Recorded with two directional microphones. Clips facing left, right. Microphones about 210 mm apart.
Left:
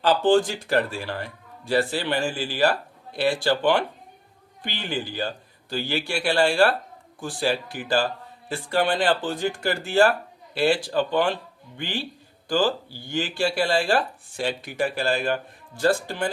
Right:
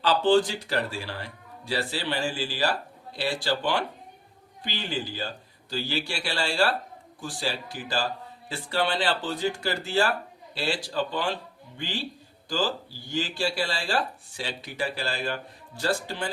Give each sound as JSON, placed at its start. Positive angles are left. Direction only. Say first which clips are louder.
{"t": 0.0, "sound": "speech", "louder": "left 2 dB", "side_deg": 50}
{"t": 12.5, "sound": "speech", "louder": "left 6 dB", "side_deg": 55}